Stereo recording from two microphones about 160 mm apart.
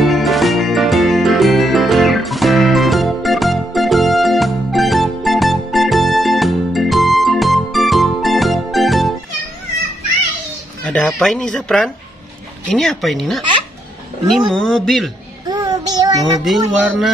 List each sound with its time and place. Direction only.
0.0 s music: centre (ahead or behind)
10.8 s speech: 5° left (ahead or behind)
15.4 s child singing: 25° right (ahead or behind)
16.4 s speech: 5° right (ahead or behind)